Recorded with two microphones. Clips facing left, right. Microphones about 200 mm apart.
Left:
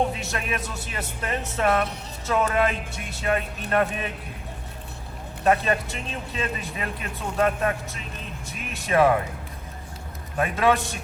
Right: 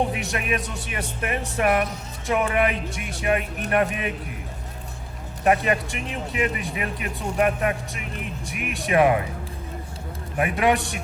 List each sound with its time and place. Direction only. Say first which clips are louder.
0.1 s speech: right 3 dB; 15° right (ahead or behind)
5.4 s speech: right 1 dB; 15° right (ahead or behind)
10.3 s speech: right 1 dB; 15° right (ahead or behind)